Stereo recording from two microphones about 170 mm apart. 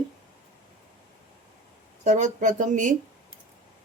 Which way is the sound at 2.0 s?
45° right (ahead or behind).